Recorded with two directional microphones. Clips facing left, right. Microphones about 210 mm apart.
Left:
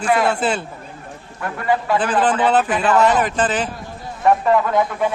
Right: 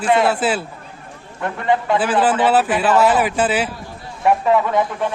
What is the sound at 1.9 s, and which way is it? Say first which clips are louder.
A man's voice: right 1 dB; 10° right (ahead or behind).